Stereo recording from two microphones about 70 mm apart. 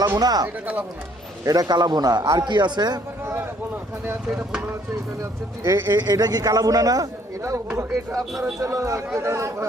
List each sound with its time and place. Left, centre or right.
0.2 s a man's voice: right
0.4 s speech: right
1.5 s a man's voice: right
2.4 s speech: right
4.3 s speech: centre
5.2 s speech: right
5.9 s speech: right
8.2 s speech: centre
8.6 s speech: right